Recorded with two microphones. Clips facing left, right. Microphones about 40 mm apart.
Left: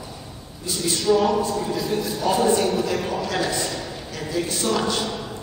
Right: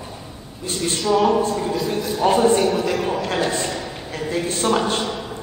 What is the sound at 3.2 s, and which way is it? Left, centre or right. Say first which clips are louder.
A man's voice: right 2 dB; right.